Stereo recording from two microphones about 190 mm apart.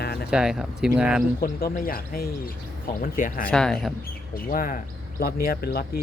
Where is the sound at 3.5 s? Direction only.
5° left (ahead or behind).